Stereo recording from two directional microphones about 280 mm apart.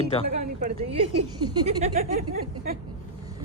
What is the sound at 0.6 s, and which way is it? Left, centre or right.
Speech, right.